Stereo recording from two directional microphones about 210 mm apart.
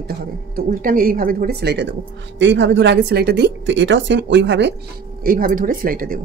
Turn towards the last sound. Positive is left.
turn(degrees=-45)  # may be behind; listen again after turning